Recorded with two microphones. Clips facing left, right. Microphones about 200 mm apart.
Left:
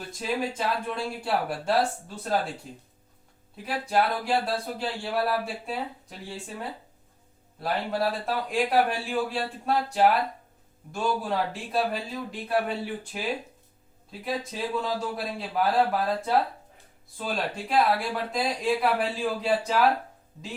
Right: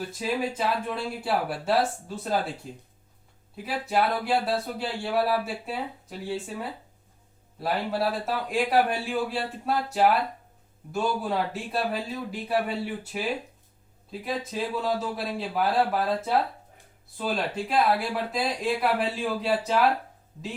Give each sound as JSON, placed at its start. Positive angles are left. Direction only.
{"t": 0.1, "sound": "speech", "side_deg": -5}